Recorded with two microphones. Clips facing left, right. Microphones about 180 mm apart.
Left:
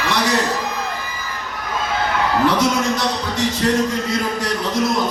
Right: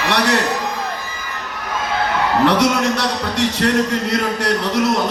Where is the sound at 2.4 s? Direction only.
70° right (ahead or behind).